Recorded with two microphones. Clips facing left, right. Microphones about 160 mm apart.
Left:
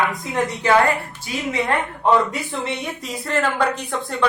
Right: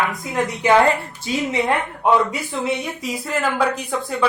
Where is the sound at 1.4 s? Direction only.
20° right (ahead or behind).